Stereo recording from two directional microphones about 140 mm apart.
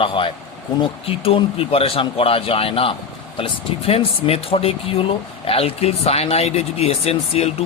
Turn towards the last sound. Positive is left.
turn(degrees=45)  # may be behind; listen again after turning